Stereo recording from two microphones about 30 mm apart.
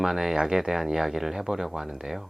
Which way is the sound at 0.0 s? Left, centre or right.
Centre.